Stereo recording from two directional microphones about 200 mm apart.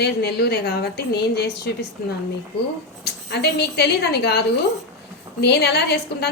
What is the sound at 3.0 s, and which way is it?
A woman's voice, 55° left (ahead or behind).